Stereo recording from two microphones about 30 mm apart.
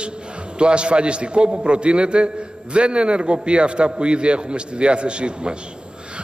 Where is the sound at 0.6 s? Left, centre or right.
Right.